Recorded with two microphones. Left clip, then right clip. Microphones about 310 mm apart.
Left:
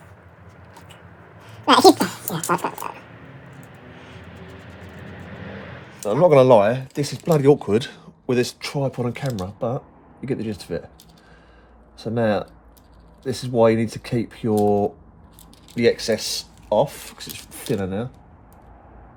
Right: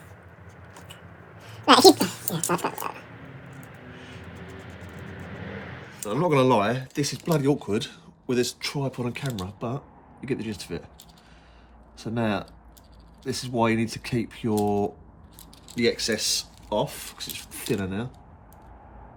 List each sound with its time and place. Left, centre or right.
1.4 s a sound: centre
2.0 s speech: centre
6.1 s speech: centre
11.9 s speech: centre
13.3 s speech: centre